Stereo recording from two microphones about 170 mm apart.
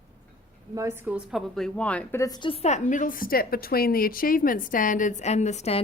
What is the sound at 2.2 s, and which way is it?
A woman's voice, 25° left (ahead or behind).